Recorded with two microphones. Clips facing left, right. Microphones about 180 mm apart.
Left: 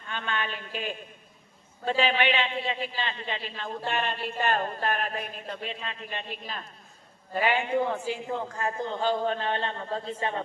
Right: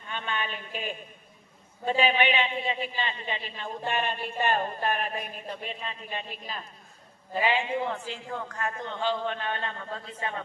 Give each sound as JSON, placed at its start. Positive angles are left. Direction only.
{"t": 0.2, "sound": "speech", "side_deg": -5}
{"t": 7.9, "sound": "a man's voice", "side_deg": 10}
{"t": 8.3, "sound": "a man's voice", "side_deg": 25}